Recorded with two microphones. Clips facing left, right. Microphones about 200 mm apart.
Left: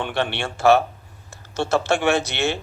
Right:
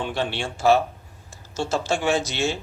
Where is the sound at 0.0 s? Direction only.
65° left (ahead or behind).